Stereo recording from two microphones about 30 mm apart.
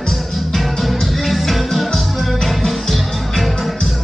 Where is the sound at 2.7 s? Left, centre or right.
Centre.